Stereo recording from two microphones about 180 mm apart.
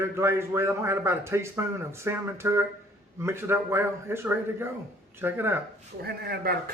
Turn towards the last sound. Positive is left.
turn(degrees=-60)  # may be behind; listen again after turning